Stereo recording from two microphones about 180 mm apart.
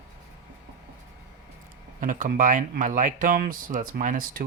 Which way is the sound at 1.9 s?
45° right (ahead or behind).